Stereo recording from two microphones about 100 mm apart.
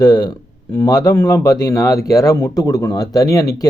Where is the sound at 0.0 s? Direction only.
40° left (ahead or behind).